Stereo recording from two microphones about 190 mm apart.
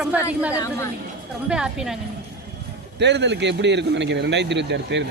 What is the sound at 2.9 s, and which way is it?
A man's voice, 65° right (ahead or behind).